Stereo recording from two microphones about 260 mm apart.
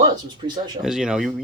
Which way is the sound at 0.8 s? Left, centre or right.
Centre.